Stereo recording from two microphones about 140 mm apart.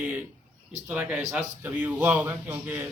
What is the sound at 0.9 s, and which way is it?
A man's voice, 10° right (ahead or behind).